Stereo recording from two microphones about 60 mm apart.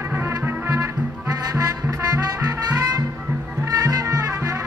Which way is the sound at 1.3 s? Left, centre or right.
Right.